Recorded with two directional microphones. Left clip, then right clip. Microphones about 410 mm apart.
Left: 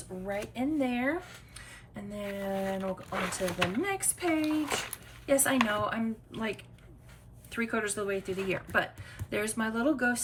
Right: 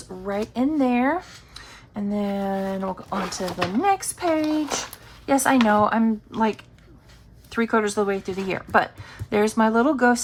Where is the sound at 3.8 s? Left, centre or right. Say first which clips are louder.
Right 11 dB; centre.